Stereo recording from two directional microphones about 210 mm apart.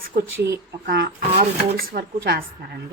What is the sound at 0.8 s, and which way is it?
Speech, 45° right (ahead or behind).